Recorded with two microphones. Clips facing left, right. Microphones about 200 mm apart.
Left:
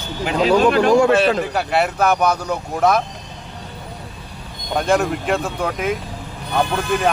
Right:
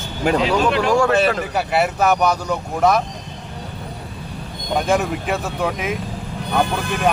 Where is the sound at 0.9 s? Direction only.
20° left (ahead or behind).